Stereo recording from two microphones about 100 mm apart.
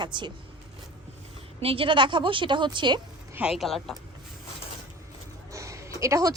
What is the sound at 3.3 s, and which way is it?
Speech, 5° right (ahead or behind).